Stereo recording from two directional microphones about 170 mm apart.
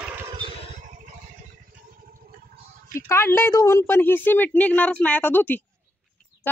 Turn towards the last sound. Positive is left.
turn(degrees=10)  # may be behind; listen again after turning